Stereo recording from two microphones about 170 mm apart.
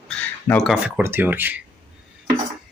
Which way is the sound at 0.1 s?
5° left (ahead or behind).